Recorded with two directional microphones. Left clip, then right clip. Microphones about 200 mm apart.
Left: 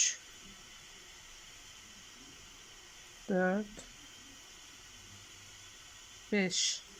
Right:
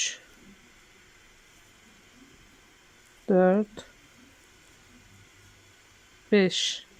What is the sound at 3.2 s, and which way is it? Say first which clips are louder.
Speech: right 11 dB; 25° right (ahead or behind).